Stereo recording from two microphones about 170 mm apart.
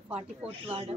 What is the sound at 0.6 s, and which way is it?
Speech, 30° right (ahead or behind).